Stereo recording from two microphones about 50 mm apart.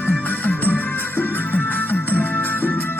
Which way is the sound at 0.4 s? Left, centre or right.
Left.